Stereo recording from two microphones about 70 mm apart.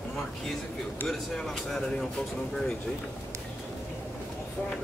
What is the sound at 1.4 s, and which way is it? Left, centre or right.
Speech, centre.